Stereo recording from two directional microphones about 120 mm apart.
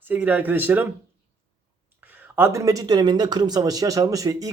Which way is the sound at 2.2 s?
20° right (ahead or behind).